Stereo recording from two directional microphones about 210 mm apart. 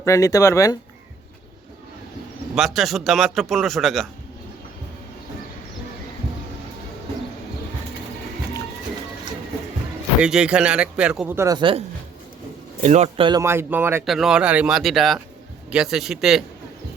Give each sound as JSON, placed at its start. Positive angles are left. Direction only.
{"t": 0.0, "sound": "speech", "side_deg": 15}
{"t": 2.6, "sound": "speech", "side_deg": 0}
{"t": 10.2, "sound": "speech", "side_deg": -5}
{"t": 12.8, "sound": "speech", "side_deg": -30}